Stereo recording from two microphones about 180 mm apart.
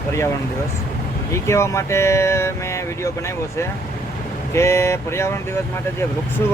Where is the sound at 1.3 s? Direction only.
15° left (ahead or behind).